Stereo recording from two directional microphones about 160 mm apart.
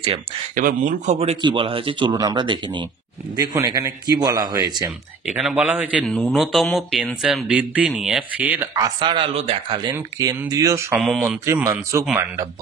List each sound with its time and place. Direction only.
0.0 s speech: 40° right (ahead or behind)
0.7 s speech: 55° right (ahead or behind)
1.2 s speech: 30° right (ahead or behind)
5.2 s speech: 5° right (ahead or behind)
8.7 s speech: 25° right (ahead or behind)
9.8 s speech: 20° right (ahead or behind)
11.0 s speech: centre (ahead or behind)
11.4 s a man's voice: 15° right (ahead or behind)